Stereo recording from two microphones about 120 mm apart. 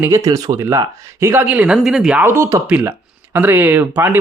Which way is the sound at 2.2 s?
20° right (ahead or behind).